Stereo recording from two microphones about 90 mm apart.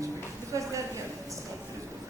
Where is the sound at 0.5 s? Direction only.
40° right (ahead or behind).